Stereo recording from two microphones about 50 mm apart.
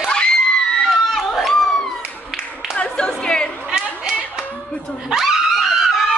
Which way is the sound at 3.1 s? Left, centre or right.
Centre.